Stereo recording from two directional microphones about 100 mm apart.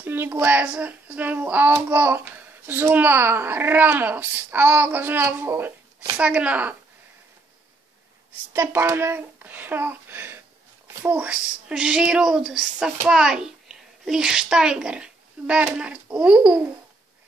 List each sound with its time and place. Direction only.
0.0 s a child's voice: 20° right (ahead or behind)
6.1 s speech: 15° right (ahead or behind)
8.5 s a child's voice: 25° right (ahead or behind)
10.9 s a sound: 25° right (ahead or behind)
11.1 s a child's voice: 10° right (ahead or behind)